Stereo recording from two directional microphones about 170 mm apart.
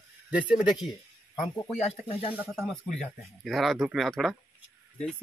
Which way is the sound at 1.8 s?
35° left (ahead or behind).